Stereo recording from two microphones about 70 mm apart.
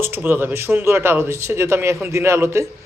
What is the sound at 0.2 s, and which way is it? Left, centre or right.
Speech, right.